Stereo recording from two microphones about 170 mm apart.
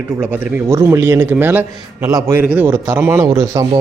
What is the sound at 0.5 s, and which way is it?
A man's voice, 15° right (ahead or behind).